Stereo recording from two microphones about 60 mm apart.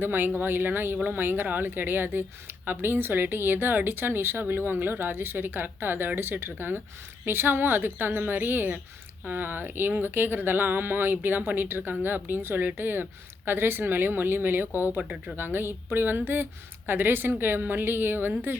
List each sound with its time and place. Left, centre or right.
0.0 s speech: right